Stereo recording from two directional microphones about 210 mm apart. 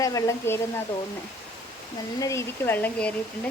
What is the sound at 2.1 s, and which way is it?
Speech, 15° left (ahead or behind).